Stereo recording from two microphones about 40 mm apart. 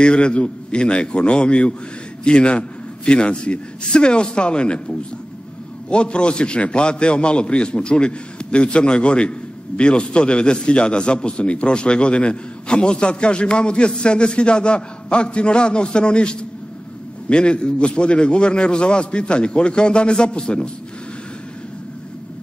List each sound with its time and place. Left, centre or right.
0.0 s a man's voice: left